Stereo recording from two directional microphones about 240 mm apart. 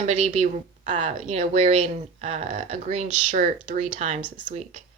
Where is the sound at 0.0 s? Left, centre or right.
Right.